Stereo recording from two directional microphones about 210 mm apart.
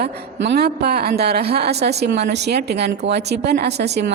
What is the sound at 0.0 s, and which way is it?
Speech, 50° right (ahead or behind).